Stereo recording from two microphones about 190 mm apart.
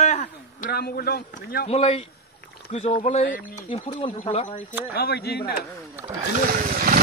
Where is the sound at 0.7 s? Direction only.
55° left (ahead or behind).